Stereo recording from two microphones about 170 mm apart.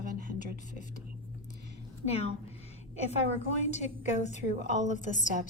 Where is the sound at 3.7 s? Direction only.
40° left (ahead or behind).